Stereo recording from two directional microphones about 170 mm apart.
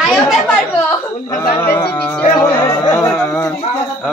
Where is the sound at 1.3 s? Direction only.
15° left (ahead or behind).